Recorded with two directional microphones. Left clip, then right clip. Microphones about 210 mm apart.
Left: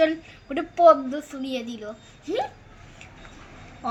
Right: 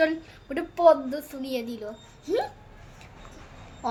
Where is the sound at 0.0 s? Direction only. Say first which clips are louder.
Left 3 dB; 5° right (ahead or behind).